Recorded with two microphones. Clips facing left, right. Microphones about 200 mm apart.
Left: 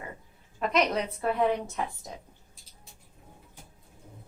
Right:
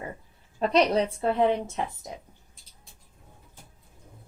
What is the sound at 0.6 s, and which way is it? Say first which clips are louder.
A woman's voice: right 4 dB; 30° right (ahead or behind).